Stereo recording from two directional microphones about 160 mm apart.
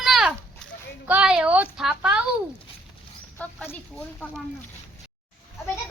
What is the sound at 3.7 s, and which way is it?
Speech, 10° left (ahead or behind).